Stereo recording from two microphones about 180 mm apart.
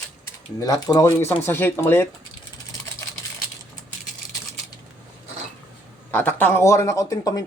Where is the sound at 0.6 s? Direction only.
20° left (ahead or behind).